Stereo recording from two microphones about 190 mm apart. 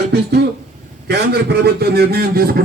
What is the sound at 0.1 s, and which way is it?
A man's voice, 60° right (ahead or behind).